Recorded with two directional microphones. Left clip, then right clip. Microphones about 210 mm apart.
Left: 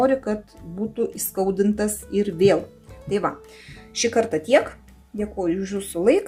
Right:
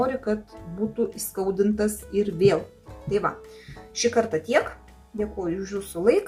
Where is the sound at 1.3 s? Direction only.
35° left (ahead or behind).